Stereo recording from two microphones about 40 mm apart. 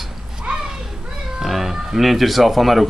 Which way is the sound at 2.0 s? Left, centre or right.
Centre.